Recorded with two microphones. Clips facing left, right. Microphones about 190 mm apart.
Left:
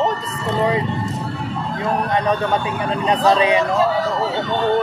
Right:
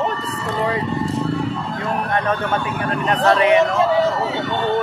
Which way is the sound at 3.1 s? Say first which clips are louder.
Even; 20° left (ahead or behind).